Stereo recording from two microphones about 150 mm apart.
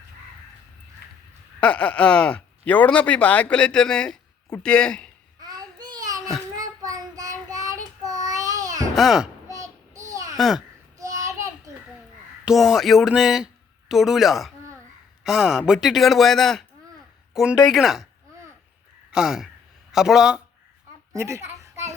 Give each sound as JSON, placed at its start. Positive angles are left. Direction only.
{"t": 1.0, "sound": "a sound", "side_deg": 90}
{"t": 1.6, "sound": "speech", "side_deg": 10}
{"t": 5.4, "sound": "a sound", "side_deg": -25}
{"t": 6.6, "sound": "child singing", "side_deg": -25}
{"t": 8.0, "sound": "babbling", "side_deg": -25}
{"t": 9.0, "sound": "a man's voice", "side_deg": 0}
{"t": 9.5, "sound": "child singing", "side_deg": -20}
{"t": 10.1, "sound": "a sound", "side_deg": -25}
{"t": 10.3, "sound": "a child's voice", "side_deg": 0}
{"t": 10.9, "sound": "child singing", "side_deg": -25}
{"t": 12.5, "sound": "a man's voice", "side_deg": 0}
{"t": 19.1, "sound": "a man's voice", "side_deg": -5}
{"t": 21.1, "sound": "a woman's voice", "side_deg": -20}